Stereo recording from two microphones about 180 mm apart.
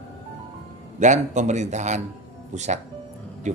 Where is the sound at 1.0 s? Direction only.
40° right (ahead or behind).